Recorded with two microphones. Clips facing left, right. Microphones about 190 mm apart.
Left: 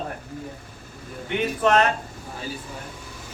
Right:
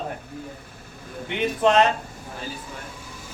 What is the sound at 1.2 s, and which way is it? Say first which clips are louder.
Speech: right 1 dB; 20° right (ahead or behind).